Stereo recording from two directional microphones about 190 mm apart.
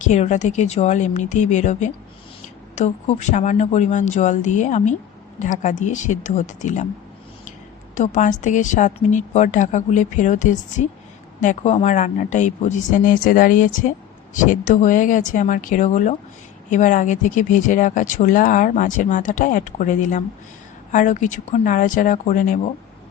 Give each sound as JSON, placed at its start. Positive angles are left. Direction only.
{"t": 0.1, "sound": "a woman's voice", "side_deg": 40}
{"t": 7.9, "sound": "a woman's voice", "side_deg": 40}